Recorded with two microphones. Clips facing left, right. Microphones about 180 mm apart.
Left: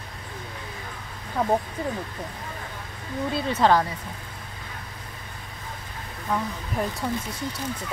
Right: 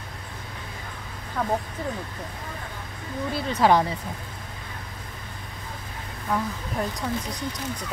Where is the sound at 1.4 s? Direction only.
15° left (ahead or behind).